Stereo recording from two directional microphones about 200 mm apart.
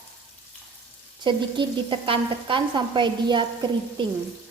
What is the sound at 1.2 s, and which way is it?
Sizzle, 25° right (ahead or behind).